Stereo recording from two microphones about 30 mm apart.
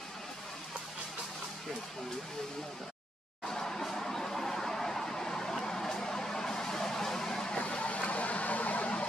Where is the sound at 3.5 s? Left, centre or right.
Centre.